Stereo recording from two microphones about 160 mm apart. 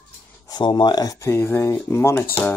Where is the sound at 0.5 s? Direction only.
30° left (ahead or behind).